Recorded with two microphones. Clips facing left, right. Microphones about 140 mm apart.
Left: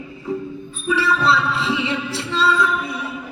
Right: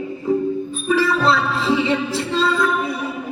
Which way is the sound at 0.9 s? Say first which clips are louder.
Right 1 dB; 45° right (ahead or behind).